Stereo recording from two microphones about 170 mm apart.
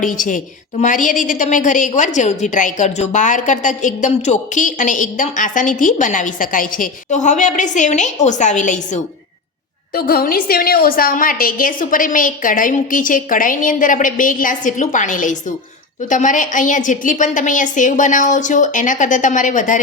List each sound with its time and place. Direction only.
0.0 s a woman's voice: 50° left (ahead or behind)
9.9 s a woman's voice: 60° left (ahead or behind)